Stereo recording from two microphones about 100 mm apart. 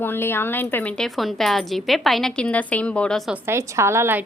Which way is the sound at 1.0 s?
Centre (ahead or behind).